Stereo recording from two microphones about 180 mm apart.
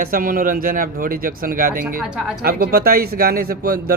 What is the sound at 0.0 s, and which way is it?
Speech, 50° right (ahead or behind).